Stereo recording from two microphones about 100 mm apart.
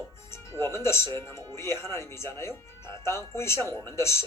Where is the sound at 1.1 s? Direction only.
25° left (ahead or behind).